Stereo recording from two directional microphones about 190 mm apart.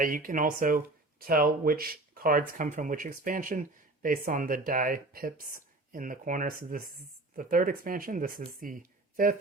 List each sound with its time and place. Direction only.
0.0 s speech: 45° right (ahead or behind)